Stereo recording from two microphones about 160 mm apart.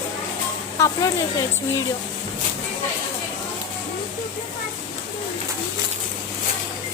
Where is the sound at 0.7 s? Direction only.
20° left (ahead or behind).